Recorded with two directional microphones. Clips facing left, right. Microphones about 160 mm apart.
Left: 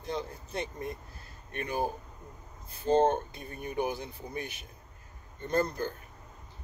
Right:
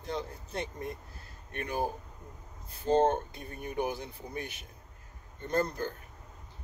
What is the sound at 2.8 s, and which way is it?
Speech, 20° left (ahead or behind).